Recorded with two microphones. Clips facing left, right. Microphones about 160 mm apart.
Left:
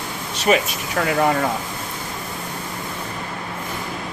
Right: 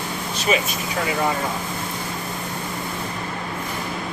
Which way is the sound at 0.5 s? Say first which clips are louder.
Left 4 dB; 55° left (ahead or behind).